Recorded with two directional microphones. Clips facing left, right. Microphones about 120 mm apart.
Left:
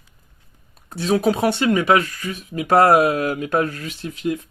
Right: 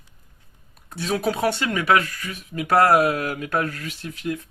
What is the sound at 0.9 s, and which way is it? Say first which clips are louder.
Speech: left 5 dB; 25° left (ahead or behind).